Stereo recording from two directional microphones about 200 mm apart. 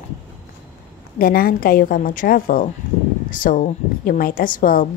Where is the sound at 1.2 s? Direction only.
45° left (ahead or behind).